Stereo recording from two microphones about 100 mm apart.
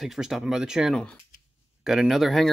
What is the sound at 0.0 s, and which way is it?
Speech, 5° right (ahead or behind).